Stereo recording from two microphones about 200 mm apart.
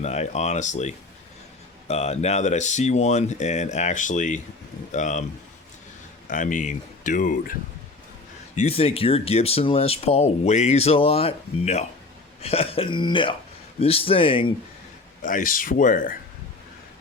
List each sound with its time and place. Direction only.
0.0 s speech: 35° left (ahead or behind)
6.2 s speech: 40° left (ahead or behind)
8.5 s speech: 30° left (ahead or behind)
15.2 s speech: 40° left (ahead or behind)